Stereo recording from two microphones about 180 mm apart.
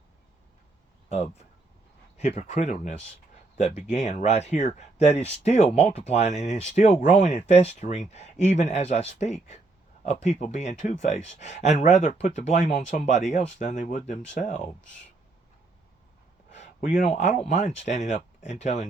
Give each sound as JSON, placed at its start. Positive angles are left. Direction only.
{"t": 1.1, "sound": "speech", "side_deg": 40}
{"t": 16.5, "sound": "speech", "side_deg": 40}